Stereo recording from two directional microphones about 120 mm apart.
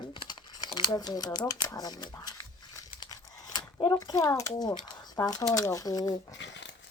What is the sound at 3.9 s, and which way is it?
Speech, 30° left (ahead or behind).